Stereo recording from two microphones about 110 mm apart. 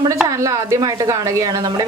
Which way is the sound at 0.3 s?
30° right (ahead or behind).